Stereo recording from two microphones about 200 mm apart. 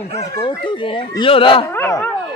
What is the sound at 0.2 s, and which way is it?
Speech, 20° left (ahead or behind).